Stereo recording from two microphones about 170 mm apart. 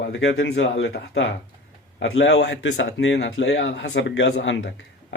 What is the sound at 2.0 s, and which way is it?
Speech, 90° left.